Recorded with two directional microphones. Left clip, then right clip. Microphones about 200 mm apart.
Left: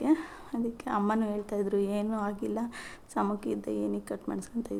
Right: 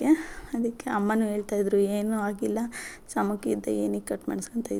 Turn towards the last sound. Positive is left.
turn(degrees=-15)  # may be behind; listen again after turning